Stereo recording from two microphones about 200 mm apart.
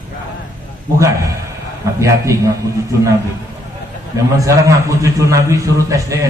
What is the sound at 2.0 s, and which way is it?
Speech, 15° right (ahead or behind).